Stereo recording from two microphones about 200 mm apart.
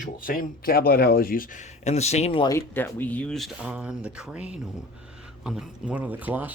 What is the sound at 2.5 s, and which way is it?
Speech, 10° left (ahead or behind).